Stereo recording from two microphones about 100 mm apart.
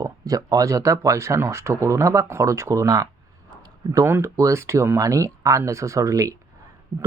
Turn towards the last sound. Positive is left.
turn(degrees=-35)  # may be behind; listen again after turning